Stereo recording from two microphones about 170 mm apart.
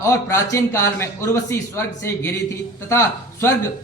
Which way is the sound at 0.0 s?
15° left (ahead or behind).